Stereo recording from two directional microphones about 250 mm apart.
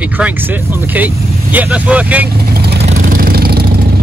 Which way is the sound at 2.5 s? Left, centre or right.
Right.